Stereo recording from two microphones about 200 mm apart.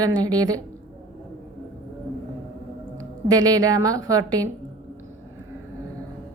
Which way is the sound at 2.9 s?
20° right (ahead or behind).